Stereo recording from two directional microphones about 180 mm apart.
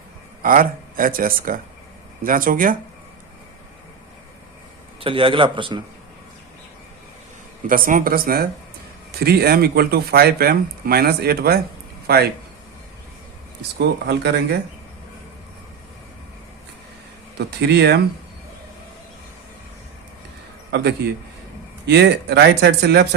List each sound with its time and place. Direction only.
0.4 s speech: 50° right (ahead or behind)
4.9 s a man's voice: 30° right (ahead or behind)
7.7 s speech: 50° right (ahead or behind)
13.6 s speech: 70° right (ahead or behind)
17.3 s speech: 75° right (ahead or behind)
20.7 s a man's voice: 65° right (ahead or behind)